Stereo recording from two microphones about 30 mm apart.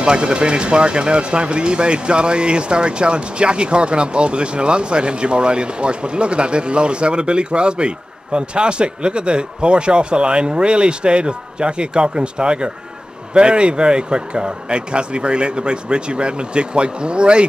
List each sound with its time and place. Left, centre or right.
0.0 s speech: right